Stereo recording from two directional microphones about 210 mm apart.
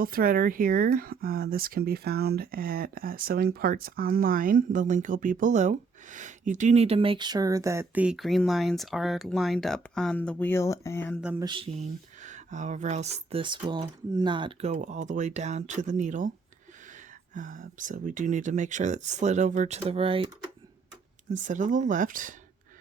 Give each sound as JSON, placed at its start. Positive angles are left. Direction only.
{"t": 0.0, "sound": "speech", "side_deg": -45}
{"t": 11.2, "sound": "mantra", "side_deg": -5}
{"t": 11.4, "sound": "speech", "side_deg": -25}
{"t": 12.2, "sound": "speech", "side_deg": -35}
{"t": 17.3, "sound": "speech", "side_deg": -40}
{"t": 21.4, "sound": "speech", "side_deg": -35}